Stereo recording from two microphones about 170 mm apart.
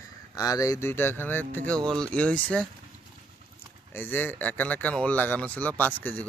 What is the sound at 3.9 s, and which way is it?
Speech, 10° left (ahead or behind).